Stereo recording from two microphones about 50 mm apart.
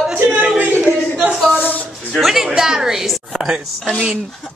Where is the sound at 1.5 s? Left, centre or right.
Left.